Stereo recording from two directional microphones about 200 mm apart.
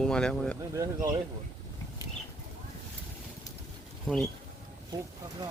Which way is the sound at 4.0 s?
Centre (ahead or behind).